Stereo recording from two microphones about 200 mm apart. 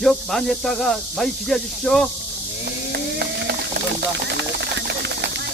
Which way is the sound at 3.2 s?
55° right (ahead or behind).